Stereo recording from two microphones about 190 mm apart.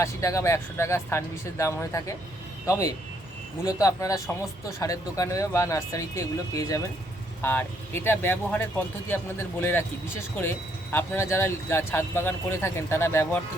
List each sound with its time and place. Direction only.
0.0 s speech: 15° left (ahead or behind)